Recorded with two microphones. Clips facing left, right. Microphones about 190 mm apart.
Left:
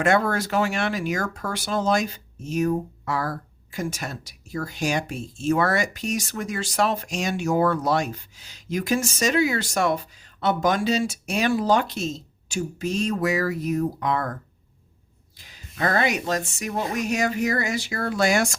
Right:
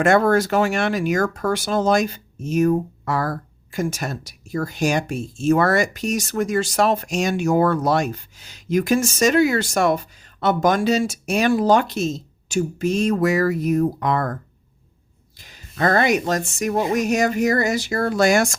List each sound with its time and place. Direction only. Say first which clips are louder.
0.0 s speech: right 5 dB; 45° right (ahead or behind)
15.8 s speech: right 5 dB; 45° right (ahead or behind)